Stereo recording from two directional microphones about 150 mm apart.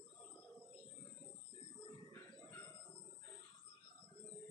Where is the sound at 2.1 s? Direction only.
20° left (ahead or behind).